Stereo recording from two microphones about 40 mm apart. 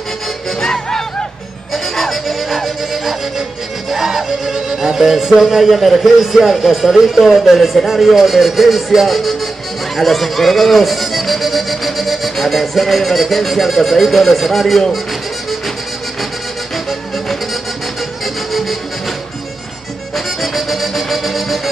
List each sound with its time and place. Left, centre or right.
0.6 s music: centre
1.7 s music: centre
9.9 s speech: centre
18.2 s music: centre
20.5 s music: centre